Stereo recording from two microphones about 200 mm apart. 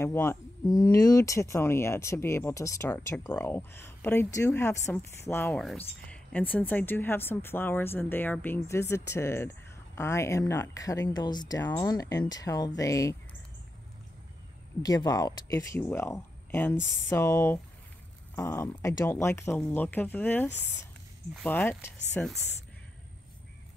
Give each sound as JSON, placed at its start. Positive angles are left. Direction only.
{"t": 0.0, "sound": "speech", "side_deg": 10}
{"t": 14.8, "sound": "speech", "side_deg": 20}
{"t": 21.5, "sound": "speech", "side_deg": 10}